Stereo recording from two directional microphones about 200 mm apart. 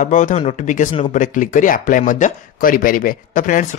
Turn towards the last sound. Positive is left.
turn(degrees=40)  # may be behind; listen again after turning